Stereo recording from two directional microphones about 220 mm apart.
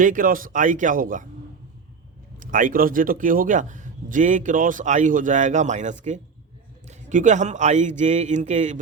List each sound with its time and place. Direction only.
0.0 s a man's voice: 35° right (ahead or behind)
2.4 s a man's voice: 35° right (ahead or behind)